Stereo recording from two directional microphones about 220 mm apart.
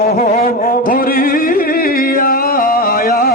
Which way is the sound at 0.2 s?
35° left (ahead or behind).